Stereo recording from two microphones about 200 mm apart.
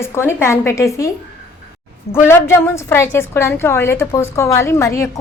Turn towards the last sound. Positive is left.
turn(degrees=15)  # may be behind; listen again after turning